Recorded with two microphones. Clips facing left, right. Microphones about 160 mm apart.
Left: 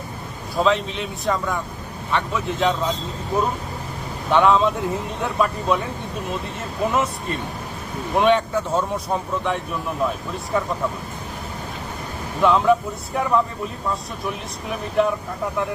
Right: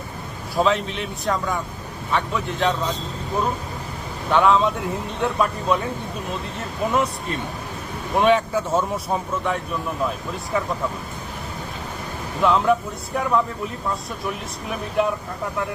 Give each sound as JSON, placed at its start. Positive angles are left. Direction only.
{"t": 0.5, "sound": "speech", "side_deg": 0}
{"t": 4.3, "sound": "speech", "side_deg": 0}
{"t": 6.8, "sound": "speech", "side_deg": 0}
{"t": 12.4, "sound": "speech", "side_deg": 0}
{"t": 13.9, "sound": "speech", "side_deg": 0}